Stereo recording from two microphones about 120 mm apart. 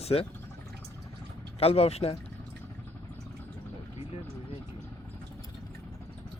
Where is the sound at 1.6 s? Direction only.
55° left (ahead or behind).